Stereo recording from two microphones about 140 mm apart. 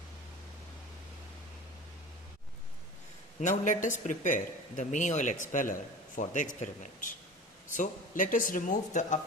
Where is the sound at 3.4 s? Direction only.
65° left (ahead or behind).